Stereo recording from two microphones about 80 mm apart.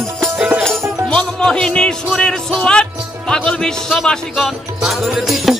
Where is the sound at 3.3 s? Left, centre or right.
Centre.